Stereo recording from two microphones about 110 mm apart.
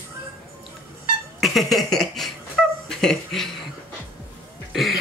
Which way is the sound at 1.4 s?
Centre (ahead or behind).